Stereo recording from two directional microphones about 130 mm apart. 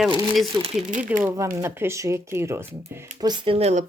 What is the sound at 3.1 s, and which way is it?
Speech, 35° right (ahead or behind).